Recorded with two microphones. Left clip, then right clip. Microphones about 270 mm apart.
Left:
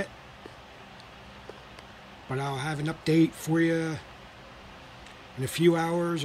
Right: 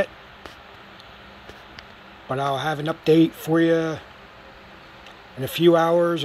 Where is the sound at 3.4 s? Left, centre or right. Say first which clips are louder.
Right 7 dB; centre.